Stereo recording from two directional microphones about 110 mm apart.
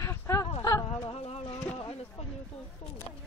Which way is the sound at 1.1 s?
65° left (ahead or behind).